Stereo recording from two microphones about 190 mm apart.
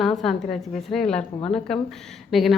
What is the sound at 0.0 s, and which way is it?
A woman's voice, centre (ahead or behind).